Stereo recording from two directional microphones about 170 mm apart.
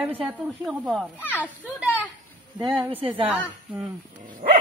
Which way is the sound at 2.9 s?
30° right (ahead or behind).